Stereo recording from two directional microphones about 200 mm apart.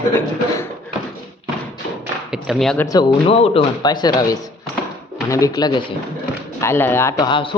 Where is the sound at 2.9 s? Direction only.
20° left (ahead or behind).